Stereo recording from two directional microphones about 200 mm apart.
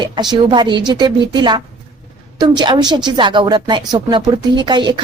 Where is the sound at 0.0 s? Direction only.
20° right (ahead or behind).